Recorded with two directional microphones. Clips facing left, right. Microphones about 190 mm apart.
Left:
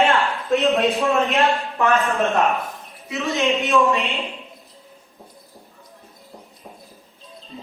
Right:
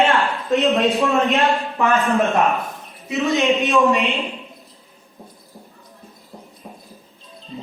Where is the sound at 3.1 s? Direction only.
15° right (ahead or behind).